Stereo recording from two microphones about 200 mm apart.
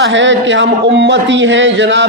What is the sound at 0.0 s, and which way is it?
A man's voice, 65° right (ahead or behind).